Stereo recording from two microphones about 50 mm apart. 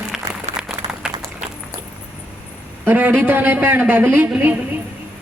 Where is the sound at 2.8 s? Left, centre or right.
Right.